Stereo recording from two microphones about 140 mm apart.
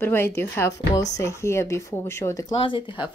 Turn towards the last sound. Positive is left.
turn(degrees=35)  # may be behind; listen again after turning